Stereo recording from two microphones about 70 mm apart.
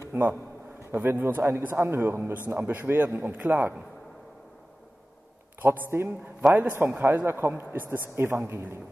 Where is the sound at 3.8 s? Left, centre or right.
Centre.